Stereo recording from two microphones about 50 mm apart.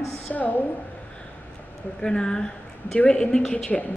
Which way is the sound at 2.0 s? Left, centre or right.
Centre.